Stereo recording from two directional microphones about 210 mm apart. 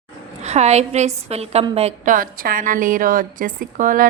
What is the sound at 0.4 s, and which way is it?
A woman's voice, 30° right (ahead or behind).